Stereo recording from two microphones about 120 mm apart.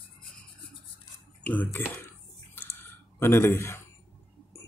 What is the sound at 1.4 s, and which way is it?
Speech, 15° left (ahead or behind).